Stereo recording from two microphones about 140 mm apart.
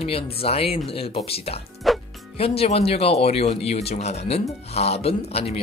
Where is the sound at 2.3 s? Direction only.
45° left (ahead or behind).